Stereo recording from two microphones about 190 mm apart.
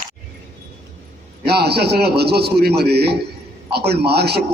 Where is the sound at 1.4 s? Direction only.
60° right (ahead or behind).